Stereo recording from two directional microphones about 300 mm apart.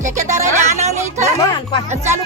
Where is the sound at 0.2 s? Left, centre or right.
Right.